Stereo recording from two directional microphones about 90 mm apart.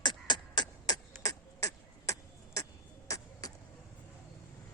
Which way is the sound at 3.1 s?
40° left (ahead or behind).